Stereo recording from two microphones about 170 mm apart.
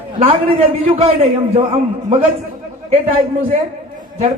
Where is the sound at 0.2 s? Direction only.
35° right (ahead or behind).